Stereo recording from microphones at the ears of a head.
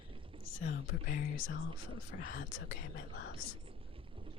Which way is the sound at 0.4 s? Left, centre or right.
Left.